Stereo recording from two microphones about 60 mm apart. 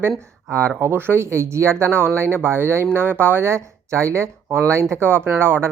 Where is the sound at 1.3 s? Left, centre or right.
Right.